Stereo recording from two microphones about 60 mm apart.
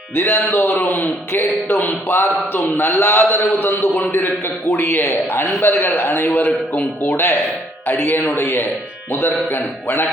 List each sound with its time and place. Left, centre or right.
0.2 s a man's voice: left
7.9 s a man's voice: left